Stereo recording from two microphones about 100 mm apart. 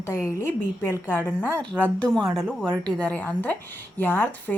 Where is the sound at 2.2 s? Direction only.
Centre (ahead or behind).